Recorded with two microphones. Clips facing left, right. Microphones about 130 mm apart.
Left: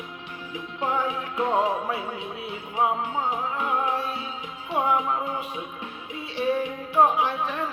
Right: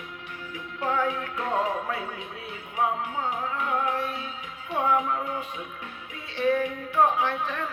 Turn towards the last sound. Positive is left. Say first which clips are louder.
# left 2 dB
turn(degrees=15)  # may be behind; listen again after turning